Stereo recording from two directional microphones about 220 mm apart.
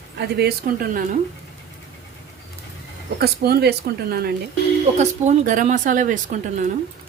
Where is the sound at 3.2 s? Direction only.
45° right (ahead or behind).